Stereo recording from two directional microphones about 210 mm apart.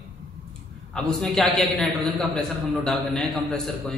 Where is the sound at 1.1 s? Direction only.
Centre (ahead or behind).